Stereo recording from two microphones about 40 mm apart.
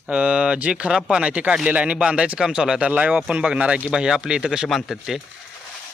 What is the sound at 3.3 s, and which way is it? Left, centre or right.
Speech, right.